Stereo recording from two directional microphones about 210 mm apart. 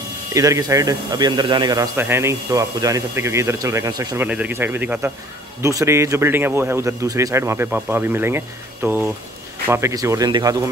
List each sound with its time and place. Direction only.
0.3 s speech: 15° right (ahead or behind)